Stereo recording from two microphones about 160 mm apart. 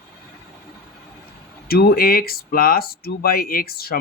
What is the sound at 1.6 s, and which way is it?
Speech, 70° left (ahead or behind).